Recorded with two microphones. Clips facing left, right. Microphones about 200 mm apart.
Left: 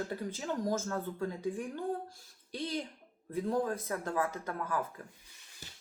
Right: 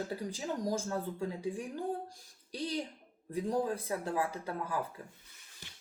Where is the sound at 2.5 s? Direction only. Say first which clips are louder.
Even; 35° right (ahead or behind).